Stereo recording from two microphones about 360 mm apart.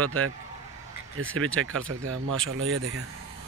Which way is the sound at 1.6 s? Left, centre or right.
Right.